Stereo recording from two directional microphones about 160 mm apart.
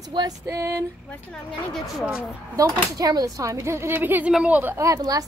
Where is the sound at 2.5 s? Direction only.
20° right (ahead or behind).